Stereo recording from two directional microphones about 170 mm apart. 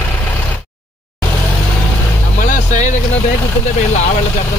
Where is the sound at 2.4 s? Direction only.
50° left (ahead or behind).